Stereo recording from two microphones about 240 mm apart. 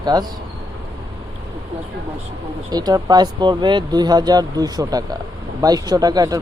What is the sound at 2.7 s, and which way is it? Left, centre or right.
Speech, centre.